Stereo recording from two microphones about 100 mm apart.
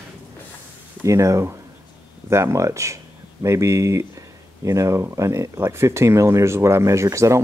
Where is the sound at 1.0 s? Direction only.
30° right (ahead or behind).